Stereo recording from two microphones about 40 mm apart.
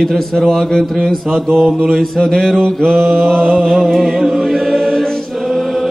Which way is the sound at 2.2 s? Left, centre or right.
Centre.